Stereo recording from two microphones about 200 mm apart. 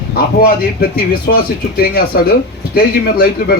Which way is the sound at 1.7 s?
50° left (ahead or behind).